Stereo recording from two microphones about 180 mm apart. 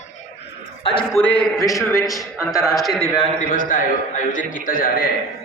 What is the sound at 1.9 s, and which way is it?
Speech, 20° left (ahead or behind).